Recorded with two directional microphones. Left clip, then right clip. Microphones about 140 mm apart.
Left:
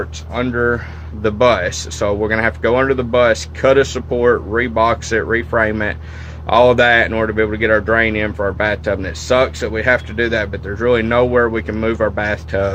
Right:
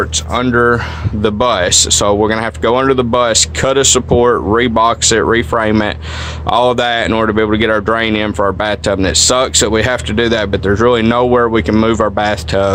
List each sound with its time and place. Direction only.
0.3 s speech: 40° right (ahead or behind); by 8.4 s 60° right (ahead or behind)
8.4 s speech: 45° right (ahead or behind)